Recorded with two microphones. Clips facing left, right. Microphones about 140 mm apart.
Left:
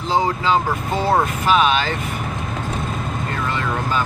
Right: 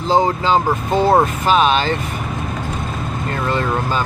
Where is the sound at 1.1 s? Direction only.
35° right (ahead or behind).